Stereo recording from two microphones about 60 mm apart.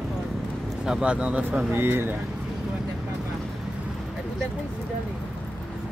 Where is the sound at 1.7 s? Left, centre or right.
Right.